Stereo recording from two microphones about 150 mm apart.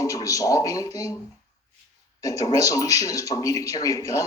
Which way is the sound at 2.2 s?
25° left (ahead or behind).